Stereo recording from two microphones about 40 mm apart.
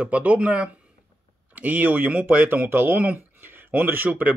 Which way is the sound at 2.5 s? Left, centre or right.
Right.